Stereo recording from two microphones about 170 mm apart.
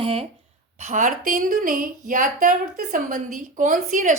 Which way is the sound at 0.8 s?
50° right (ahead or behind).